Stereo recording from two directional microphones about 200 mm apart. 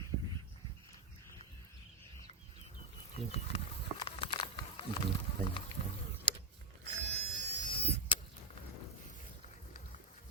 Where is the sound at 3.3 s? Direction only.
30° left (ahead or behind).